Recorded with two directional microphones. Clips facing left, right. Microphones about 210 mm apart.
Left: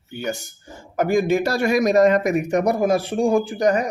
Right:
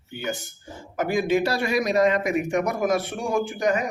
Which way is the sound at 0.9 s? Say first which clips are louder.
Left 4 dB; 45° left (ahead or behind).